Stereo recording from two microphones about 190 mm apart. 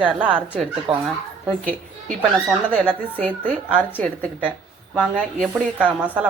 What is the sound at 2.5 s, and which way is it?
Speech, 10° left (ahead or behind).